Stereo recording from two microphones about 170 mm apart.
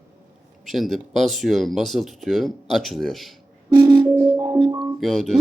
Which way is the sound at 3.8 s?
10° right (ahead or behind).